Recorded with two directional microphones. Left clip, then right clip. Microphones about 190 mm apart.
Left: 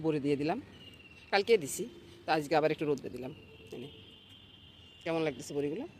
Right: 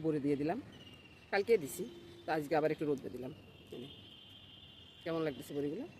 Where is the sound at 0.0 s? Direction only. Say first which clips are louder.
Left 3 dB; 10° left (ahead or behind).